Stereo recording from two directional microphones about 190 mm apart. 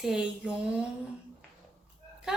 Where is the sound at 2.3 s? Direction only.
5° right (ahead or behind).